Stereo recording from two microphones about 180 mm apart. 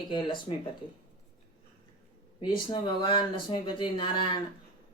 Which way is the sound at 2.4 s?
25° left (ahead or behind).